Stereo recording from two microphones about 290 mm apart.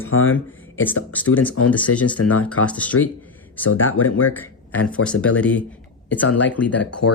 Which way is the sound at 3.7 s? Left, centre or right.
Left.